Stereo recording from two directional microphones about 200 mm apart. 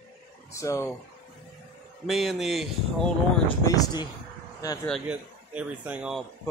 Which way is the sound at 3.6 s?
15° left (ahead or behind).